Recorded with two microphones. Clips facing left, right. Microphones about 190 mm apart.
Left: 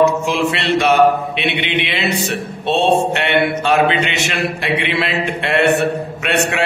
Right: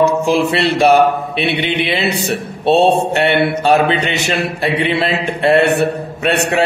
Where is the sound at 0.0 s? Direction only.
35° right (ahead or behind).